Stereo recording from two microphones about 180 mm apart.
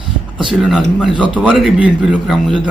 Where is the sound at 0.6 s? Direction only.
Centre (ahead or behind).